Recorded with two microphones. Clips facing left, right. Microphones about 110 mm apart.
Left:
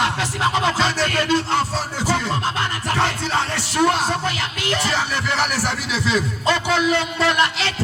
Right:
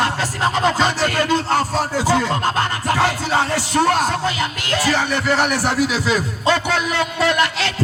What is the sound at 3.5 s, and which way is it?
Speech, 45° right (ahead or behind).